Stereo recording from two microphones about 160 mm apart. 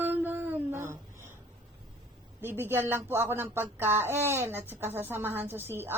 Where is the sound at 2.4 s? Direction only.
15° right (ahead or behind).